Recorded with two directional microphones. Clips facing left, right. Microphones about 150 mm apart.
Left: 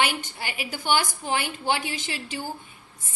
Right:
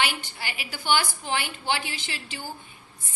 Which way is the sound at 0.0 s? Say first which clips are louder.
Left 2 dB; 50° left (ahead or behind).